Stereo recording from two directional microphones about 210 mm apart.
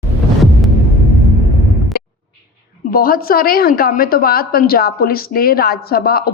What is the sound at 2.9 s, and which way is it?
A woman's voice, 45° left (ahead or behind).